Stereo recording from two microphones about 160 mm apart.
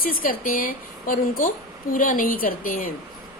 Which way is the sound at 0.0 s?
60° left (ahead or behind).